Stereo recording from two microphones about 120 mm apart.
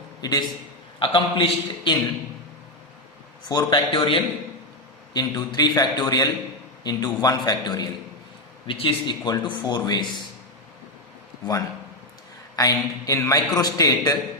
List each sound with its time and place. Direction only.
0.2 s a man's voice: 35° left (ahead or behind)
0.9 s a man's voice: 45° left (ahead or behind)
3.5 s speech: 35° left (ahead or behind)
8.6 s speech: 45° left (ahead or behind)
12.5 s a man's voice: 30° left (ahead or behind)